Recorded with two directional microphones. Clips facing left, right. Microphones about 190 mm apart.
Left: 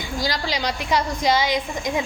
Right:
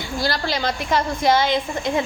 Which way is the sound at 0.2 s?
15° left (ahead or behind).